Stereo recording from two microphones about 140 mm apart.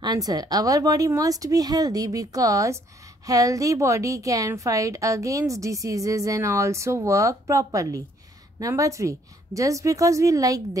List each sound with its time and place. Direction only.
0.0 s a woman's voice: 30° right (ahead or behind)